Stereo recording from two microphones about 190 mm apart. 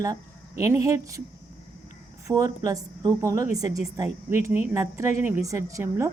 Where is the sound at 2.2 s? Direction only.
15° right (ahead or behind).